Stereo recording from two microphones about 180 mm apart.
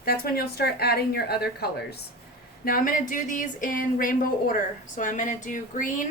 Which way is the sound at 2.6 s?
50° left (ahead or behind).